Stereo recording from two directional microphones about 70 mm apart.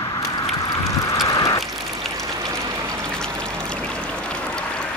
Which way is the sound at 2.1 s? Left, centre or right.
Right.